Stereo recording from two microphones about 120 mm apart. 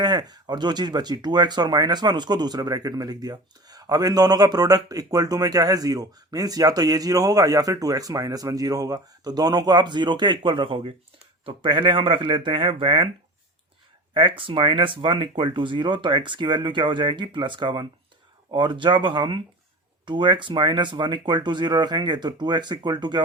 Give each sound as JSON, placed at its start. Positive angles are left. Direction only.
{"t": 0.0, "sound": "speech", "side_deg": -35}
{"t": 14.1, "sound": "speech", "side_deg": -40}